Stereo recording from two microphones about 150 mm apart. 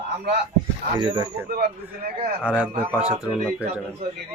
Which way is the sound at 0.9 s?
30° right (ahead or behind).